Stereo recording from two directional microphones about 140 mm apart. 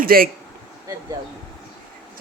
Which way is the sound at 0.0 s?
90° right.